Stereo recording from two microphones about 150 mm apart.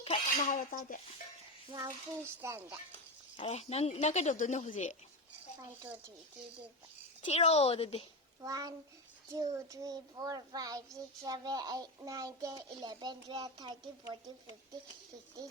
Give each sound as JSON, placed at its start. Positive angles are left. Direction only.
{"t": 0.3, "sound": "speech", "side_deg": 60}
{"t": 1.7, "sound": "cutlery", "side_deg": -20}
{"t": 3.4, "sound": "a woman's voice", "side_deg": 45}
{"t": 7.2, "sound": "a woman's voice", "side_deg": 50}
{"t": 8.4, "sound": "child singing", "side_deg": -25}